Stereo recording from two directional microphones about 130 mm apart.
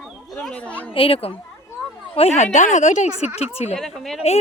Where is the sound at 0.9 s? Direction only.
45° left (ahead or behind); by 3.1 s 65° left (ahead or behind).